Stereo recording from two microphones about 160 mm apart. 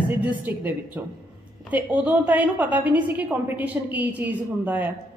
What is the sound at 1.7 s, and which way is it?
A woman's voice, 10° right (ahead or behind).